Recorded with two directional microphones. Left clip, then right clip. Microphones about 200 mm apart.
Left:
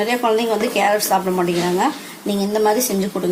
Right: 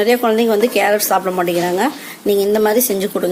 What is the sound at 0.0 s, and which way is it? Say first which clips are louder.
Speech: right 4 dB; 40° right (ahead or behind).